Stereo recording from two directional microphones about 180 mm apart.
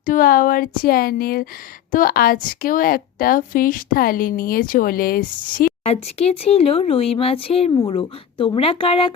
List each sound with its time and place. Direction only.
0.0 s a woman's voice: 50° left (ahead or behind)
5.8 s speech: 35° left (ahead or behind)